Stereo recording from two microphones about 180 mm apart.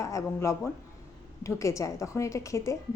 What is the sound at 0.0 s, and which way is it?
A woman's voice, 15° left (ahead or behind).